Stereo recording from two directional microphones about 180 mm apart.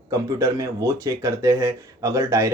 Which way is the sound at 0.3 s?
15° right (ahead or behind).